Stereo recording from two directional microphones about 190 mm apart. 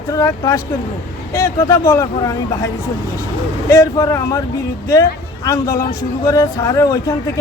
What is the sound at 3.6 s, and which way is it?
Speech, 15° left (ahead or behind).